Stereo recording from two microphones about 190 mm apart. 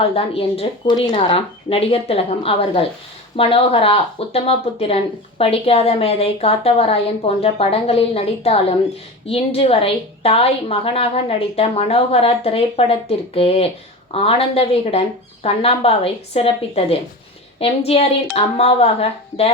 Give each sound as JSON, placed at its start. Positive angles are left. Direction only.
{"t": 0.0, "sound": "a woman's voice", "side_deg": 30}